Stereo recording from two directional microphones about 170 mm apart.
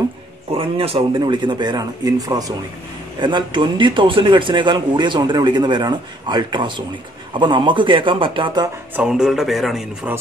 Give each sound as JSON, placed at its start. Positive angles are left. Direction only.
{"t": 0.5, "sound": "speech", "side_deg": -35}
{"t": 8.9, "sound": "speech", "side_deg": -5}